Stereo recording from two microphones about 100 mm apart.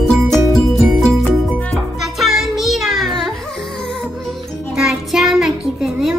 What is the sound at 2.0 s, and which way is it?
Child singing, centre (ahead or behind).